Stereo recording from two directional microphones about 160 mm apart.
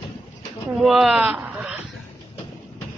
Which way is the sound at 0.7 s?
Centre (ahead or behind).